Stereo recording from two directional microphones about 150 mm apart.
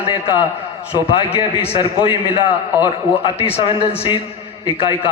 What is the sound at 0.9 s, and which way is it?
A man's voice, 35° left (ahead or behind).